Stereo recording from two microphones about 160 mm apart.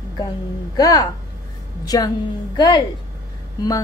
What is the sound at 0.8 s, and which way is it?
A woman's voice, 25° left (ahead or behind).